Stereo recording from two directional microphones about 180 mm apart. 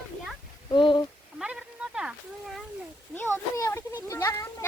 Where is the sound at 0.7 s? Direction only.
25° left (ahead or behind).